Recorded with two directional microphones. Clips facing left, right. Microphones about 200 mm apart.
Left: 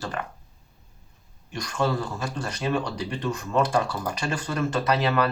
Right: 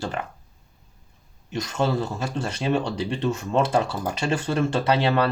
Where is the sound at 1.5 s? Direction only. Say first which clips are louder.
Right 2 dB; 25° right (ahead or behind).